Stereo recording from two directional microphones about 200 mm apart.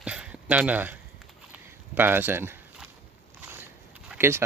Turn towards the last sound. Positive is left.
turn(degrees=-10)  # may be behind; listen again after turning